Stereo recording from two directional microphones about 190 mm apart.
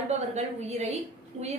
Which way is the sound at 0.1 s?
35° right (ahead or behind).